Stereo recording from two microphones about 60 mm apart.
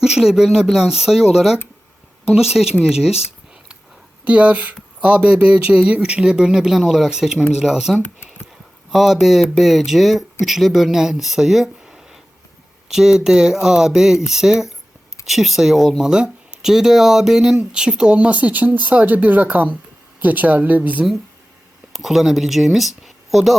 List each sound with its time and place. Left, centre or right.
0.0 s speech: centre
4.3 s a woman's voice: right
21.9 s speech: centre